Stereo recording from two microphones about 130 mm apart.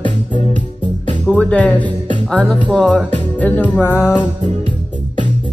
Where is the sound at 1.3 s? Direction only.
10° left (ahead or behind).